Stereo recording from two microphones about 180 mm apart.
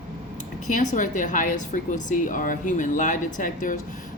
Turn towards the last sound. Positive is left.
turn(degrees=45)  # may be behind; listen again after turning